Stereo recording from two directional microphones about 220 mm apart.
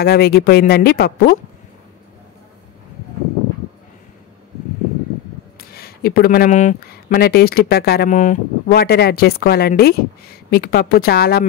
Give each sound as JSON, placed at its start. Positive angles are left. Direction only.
{"t": 0.0, "sound": "speech", "side_deg": 45}
{"t": 5.6, "sound": "speech", "side_deg": 45}